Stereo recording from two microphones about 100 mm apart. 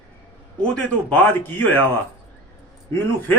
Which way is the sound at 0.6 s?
15° left (ahead or behind).